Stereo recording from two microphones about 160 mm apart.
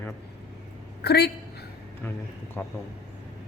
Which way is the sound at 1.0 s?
90° left.